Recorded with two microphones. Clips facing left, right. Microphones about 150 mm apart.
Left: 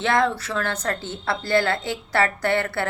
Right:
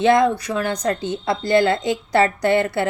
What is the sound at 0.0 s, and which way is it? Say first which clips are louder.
A woman's voice: right 6 dB; 15° right (ahead or behind).